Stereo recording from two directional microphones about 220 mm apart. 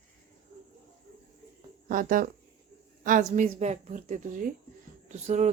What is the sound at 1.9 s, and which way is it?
Speech, 40° right (ahead or behind).